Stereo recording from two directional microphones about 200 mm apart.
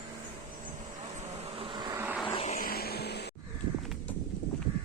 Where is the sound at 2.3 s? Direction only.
30° left (ahead or behind).